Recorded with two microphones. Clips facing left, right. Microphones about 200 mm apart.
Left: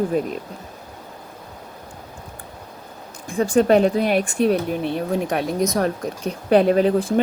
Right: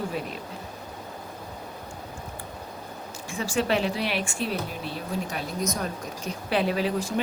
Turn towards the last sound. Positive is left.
turn(degrees=55)  # may be behind; listen again after turning